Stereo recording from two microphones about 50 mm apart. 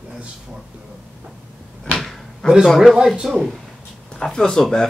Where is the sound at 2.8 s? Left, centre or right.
Centre.